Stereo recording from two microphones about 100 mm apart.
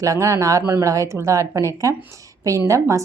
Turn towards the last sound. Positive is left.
turn(degrees=-30)  # may be behind; listen again after turning